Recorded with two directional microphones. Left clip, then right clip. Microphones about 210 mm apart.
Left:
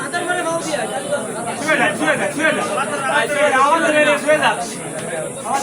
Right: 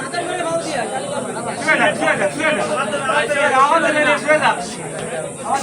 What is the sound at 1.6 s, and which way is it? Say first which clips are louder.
Speech: right 1 dB; 25° right (ahead or behind).